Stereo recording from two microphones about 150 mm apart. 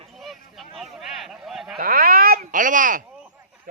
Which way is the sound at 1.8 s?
75° right (ahead or behind).